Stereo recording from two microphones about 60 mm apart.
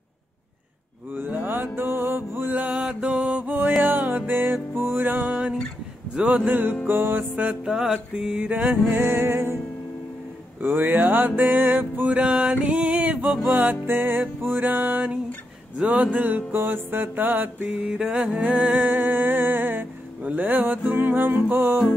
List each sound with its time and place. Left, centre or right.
1.1 s mantra: right
2.5 s mantra: right
3.8 s music: right
7.6 s music: centre
8.5 s music: right
10.6 s music: right
12.1 s a sound: centre
13.5 s music: right
15.8 s music: right
17.8 s music: centre
18.4 s music: right